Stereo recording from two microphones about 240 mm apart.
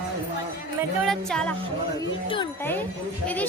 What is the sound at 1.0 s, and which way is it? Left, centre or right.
Music, centre.